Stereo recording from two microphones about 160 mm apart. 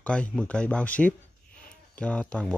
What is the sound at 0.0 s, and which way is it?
Speech, 5° left (ahead or behind).